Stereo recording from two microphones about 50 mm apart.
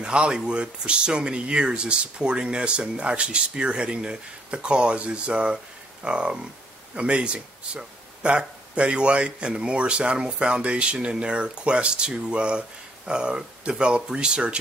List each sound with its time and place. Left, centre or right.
0.0 s speech: right